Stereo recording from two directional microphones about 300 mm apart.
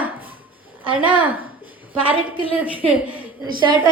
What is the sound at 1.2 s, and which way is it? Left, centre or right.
Speech, centre.